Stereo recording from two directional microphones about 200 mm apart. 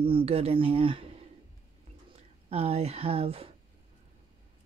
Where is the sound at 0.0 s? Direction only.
30° right (ahead or behind).